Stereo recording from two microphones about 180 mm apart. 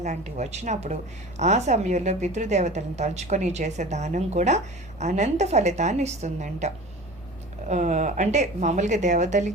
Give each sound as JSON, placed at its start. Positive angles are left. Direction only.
{"t": 0.0, "sound": "a woman's voice", "side_deg": -40}
{"t": 7.7, "sound": "a woman's voice", "side_deg": -40}